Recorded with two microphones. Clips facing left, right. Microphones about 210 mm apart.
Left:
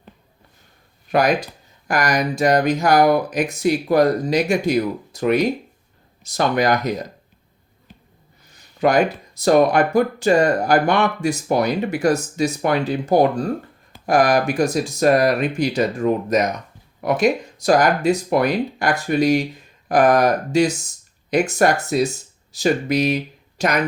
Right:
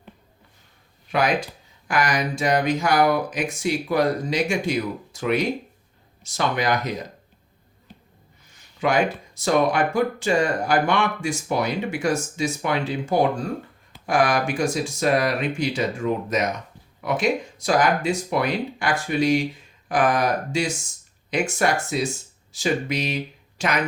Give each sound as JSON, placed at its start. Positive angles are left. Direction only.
{"t": 1.1, "sound": "speech", "side_deg": 40}
{"t": 8.8, "sound": "speech", "side_deg": 40}
{"t": 20.5, "sound": "speech", "side_deg": 40}